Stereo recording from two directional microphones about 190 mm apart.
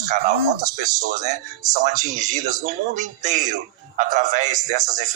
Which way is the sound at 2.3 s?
40° right (ahead or behind).